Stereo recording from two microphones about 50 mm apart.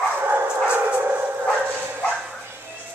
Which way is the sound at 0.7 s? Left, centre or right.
Right.